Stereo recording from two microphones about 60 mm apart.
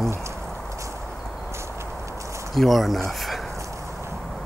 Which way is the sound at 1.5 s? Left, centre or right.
Right.